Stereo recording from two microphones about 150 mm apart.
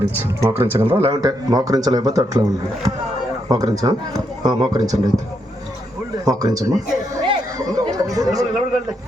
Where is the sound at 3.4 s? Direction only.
25° right (ahead or behind).